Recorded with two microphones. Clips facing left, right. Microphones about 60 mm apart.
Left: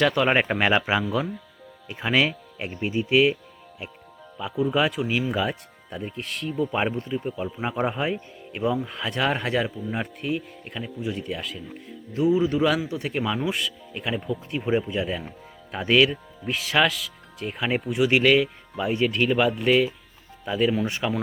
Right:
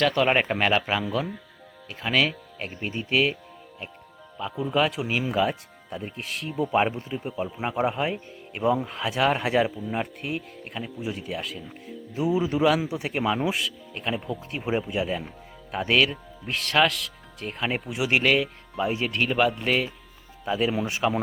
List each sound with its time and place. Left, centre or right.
0.0 s speech: centre
4.4 s speech: centre
5.0 s speech: centre
5.3 s speech: centre
6.6 s speech: centre
12.2 s speech: centre
13.5 s speech: centre